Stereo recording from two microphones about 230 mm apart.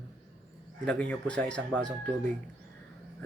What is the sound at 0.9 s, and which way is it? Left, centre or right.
Speech, centre.